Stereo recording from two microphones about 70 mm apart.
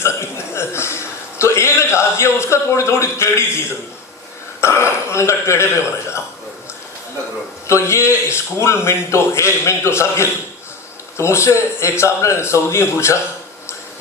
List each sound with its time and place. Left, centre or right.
0.0 s burping: left
1.4 s speech: left
4.6 s speech: left
7.7 s speech: left